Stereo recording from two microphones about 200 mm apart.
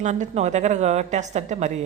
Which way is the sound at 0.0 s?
35° right (ahead or behind).